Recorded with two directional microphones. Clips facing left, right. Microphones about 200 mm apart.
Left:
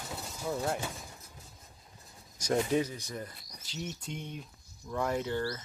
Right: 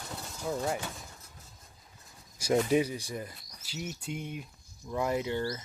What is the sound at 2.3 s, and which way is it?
Speech, 10° right (ahead or behind).